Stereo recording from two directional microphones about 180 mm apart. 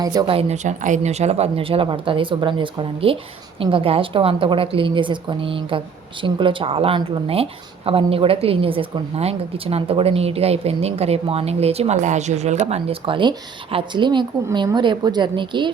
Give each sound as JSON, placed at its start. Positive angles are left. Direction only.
{"t": 0.0, "sound": "a woman's voice", "side_deg": -20}